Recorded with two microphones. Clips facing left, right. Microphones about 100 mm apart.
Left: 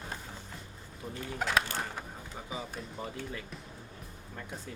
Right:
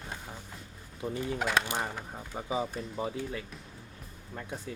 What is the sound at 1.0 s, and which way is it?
Speech, 10° right (ahead or behind).